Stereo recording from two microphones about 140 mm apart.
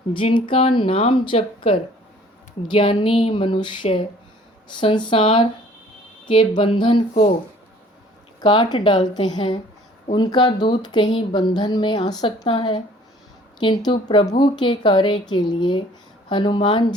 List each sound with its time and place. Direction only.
0.1 s speech: 40° left (ahead or behind)
7.1 s speech: 50° left (ahead or behind)
8.4 s speech: 30° left (ahead or behind)